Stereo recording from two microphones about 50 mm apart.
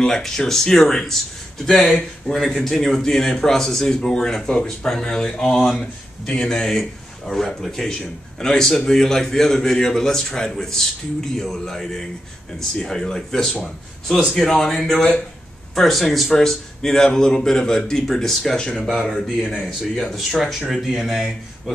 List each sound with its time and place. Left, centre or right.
0.0 s speech: centre
5.6 s speech: centre
6.2 s speech: centre
15.0 s speech: left
15.7 s speech: centre